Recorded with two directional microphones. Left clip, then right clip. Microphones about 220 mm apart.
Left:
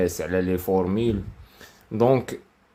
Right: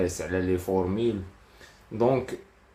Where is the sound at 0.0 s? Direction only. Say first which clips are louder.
Left 4 dB; 40° left (ahead or behind).